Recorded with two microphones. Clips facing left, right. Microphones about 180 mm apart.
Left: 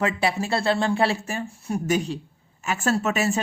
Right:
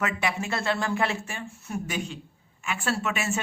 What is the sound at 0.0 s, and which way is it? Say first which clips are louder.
Speech: left 5 dB; 35° left (ahead or behind).